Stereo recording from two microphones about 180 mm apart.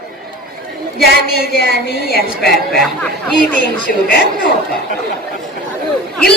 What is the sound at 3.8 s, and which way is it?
Speech, 55° left (ahead or behind).